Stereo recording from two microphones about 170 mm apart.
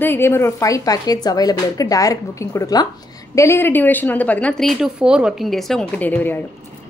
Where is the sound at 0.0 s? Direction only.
15° left (ahead or behind).